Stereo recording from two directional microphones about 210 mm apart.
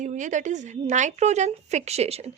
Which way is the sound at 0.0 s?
35° right (ahead or behind).